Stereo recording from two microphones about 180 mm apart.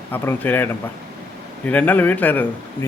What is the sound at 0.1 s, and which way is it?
A man's voice, 10° left (ahead or behind).